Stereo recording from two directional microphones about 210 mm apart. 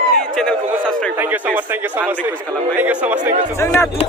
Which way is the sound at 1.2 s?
10° right (ahead or behind).